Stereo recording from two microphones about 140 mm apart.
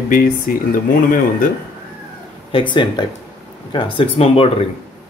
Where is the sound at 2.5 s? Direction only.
35° left (ahead or behind).